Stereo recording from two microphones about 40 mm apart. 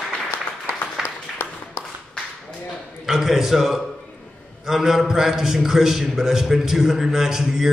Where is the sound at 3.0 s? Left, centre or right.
Centre.